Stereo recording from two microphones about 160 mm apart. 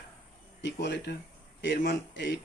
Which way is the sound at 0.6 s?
90° left.